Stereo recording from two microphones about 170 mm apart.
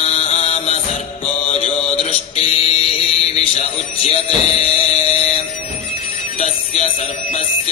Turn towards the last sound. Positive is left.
turn(degrees=35)  # may be behind; listen again after turning